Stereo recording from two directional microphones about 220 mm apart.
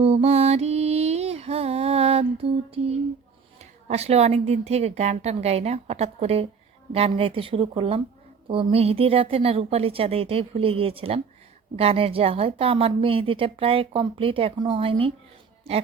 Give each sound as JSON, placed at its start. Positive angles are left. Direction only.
{"t": 0.0, "sound": "music", "side_deg": -25}
{"t": 3.6, "sound": "a woman's voice", "side_deg": -30}